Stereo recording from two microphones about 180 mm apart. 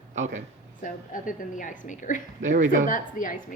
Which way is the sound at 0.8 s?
50° left (ahead or behind).